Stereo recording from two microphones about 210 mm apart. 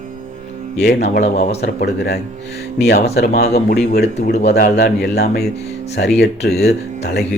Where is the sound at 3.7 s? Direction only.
45° left (ahead or behind).